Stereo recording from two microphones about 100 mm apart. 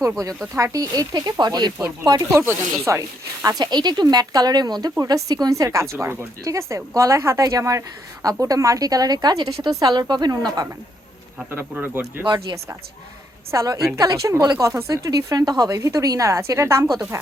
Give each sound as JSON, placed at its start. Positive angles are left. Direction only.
{"t": 0.0, "sound": "speech", "side_deg": -30}
{"t": 2.4, "sound": "speech", "side_deg": -25}
{"t": 3.6, "sound": "speech", "side_deg": -45}
{"t": 11.7, "sound": "speech", "side_deg": -20}
{"t": 12.2, "sound": "speech", "side_deg": -45}
{"t": 13.5, "sound": "speech", "side_deg": -30}